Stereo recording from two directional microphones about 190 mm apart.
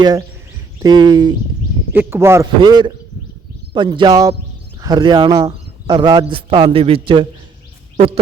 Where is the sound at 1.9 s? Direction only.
10° right (ahead or behind).